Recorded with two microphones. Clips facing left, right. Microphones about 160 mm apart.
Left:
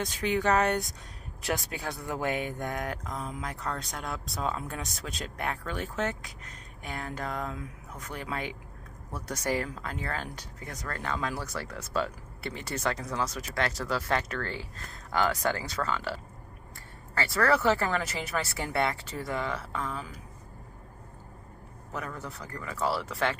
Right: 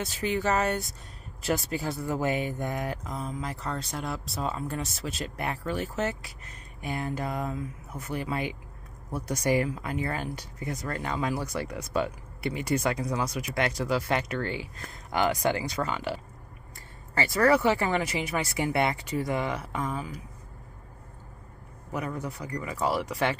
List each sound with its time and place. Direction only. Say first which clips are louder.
0.0 s speech: even; 5° right (ahead or behind)
21.9 s speech: right 5 dB; 15° right (ahead or behind)